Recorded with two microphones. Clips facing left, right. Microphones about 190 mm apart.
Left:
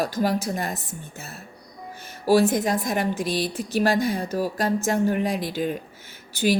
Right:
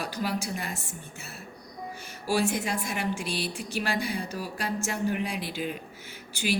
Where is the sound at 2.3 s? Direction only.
40° left (ahead or behind).